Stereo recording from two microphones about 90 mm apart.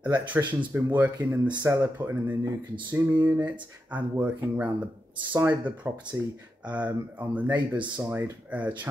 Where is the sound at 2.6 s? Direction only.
60° right (ahead or behind).